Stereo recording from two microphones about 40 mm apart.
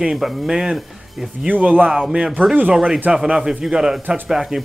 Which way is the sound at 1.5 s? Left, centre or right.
Right.